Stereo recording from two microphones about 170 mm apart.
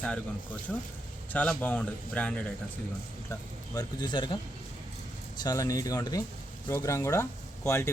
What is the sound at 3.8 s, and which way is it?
Speech, 25° left (ahead or behind).